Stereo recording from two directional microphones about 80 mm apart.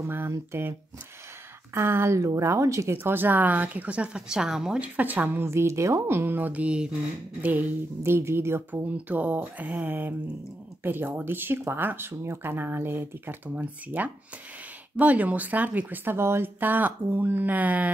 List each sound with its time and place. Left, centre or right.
0.0 s a woman's voice: right
3.0 s speech: right
7.4 s a woman's voice: right
8.8 s speech: centre